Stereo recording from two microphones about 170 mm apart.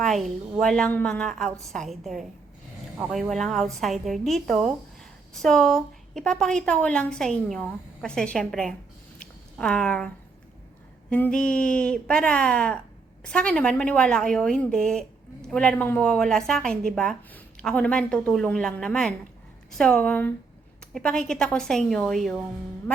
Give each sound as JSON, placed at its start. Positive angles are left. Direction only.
{"t": 0.0, "sound": "a woman's voice", "side_deg": 0}
{"t": 9.1, "sound": "a sound", "side_deg": 5}
{"t": 11.1, "sound": "a woman's voice", "side_deg": 5}